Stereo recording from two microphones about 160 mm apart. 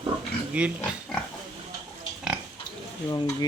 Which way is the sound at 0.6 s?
5° right (ahead or behind).